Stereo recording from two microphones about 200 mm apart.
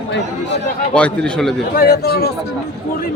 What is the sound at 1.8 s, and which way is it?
Speech, 50° left (ahead or behind).